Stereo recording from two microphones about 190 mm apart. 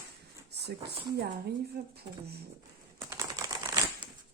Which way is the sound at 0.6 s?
55° right (ahead or behind).